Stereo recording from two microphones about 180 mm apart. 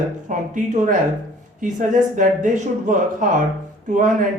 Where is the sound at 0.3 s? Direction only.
45° right (ahead or behind).